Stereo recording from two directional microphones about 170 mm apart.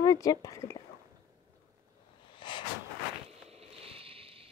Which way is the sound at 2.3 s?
30° left (ahead or behind).